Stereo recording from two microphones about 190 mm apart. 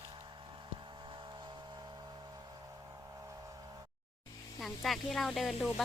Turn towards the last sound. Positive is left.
turn(degrees=0)  # may be behind; listen again after turning